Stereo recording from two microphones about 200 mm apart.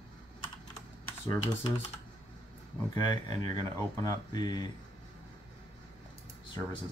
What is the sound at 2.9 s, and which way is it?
Speech, 20° left (ahead or behind).